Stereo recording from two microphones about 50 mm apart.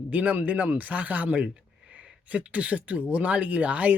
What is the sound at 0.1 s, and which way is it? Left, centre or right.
Speech, right.